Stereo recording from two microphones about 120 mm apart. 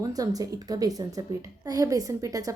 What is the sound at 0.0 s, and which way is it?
Speech, 30° right (ahead or behind).